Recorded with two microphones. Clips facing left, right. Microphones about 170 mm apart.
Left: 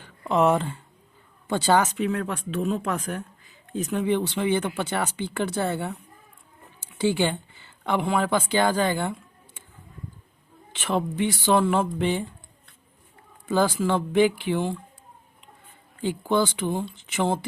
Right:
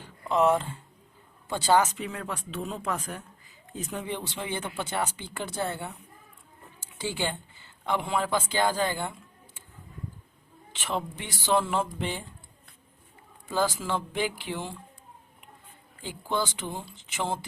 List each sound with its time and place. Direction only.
0.3 s speech: 65° left (ahead or behind)
6.7 s a sound: 60° left (ahead or behind)
7.9 s speech: 60° left (ahead or behind)
10.7 s speech: 60° left (ahead or behind)
13.5 s speech: 60° left (ahead or behind)
16.0 s speech: 60° left (ahead or behind)